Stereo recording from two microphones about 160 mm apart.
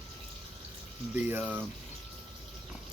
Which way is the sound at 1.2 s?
10° right (ahead or behind).